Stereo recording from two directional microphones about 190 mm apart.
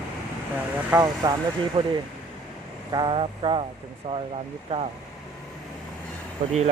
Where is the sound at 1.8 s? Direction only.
30° right (ahead or behind).